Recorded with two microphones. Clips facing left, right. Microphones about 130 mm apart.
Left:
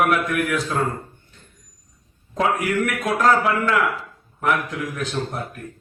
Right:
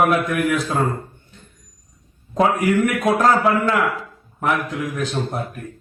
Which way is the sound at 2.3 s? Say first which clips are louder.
Right 4 dB; 25° right (ahead or behind).